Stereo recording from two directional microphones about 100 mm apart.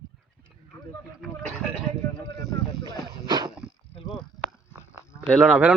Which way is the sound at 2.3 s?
40° left (ahead or behind).